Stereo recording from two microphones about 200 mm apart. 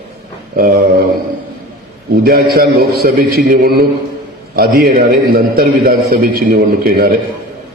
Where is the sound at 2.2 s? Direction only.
50° right (ahead or behind).